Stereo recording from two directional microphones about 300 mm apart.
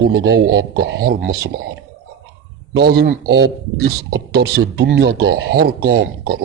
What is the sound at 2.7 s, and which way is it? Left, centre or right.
A man's voice, right.